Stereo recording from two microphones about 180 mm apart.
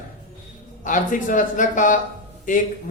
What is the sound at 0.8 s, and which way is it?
Speech, 45° left (ahead or behind).